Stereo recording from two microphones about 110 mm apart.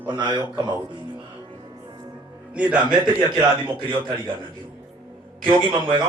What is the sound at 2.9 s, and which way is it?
Speech, 45° right (ahead or behind).